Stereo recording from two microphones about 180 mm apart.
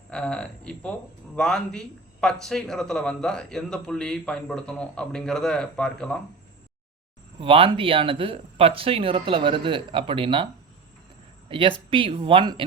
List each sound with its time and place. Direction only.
0.1 s speech: 5° left (ahead or behind)
7.3 s speech: 30° right (ahead or behind)